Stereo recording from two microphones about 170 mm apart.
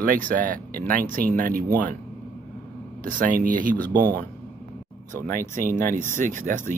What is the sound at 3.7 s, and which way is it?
Speech, 10° left (ahead or behind).